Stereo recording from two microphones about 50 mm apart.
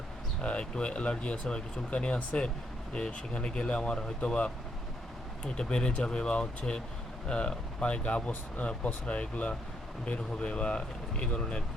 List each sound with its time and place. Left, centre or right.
0.4 s speech: left
5.5 s speech: centre